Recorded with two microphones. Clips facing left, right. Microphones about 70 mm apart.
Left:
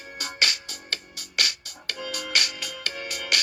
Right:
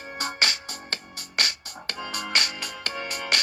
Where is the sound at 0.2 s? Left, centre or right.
Right.